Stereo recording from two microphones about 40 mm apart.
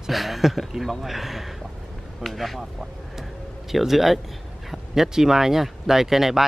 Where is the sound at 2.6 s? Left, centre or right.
Centre.